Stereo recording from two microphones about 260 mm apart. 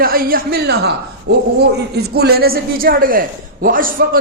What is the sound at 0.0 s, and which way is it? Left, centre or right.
Speech, right.